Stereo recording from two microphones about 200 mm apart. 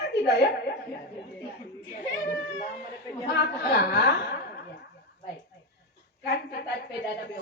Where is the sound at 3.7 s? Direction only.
55° left (ahead or behind).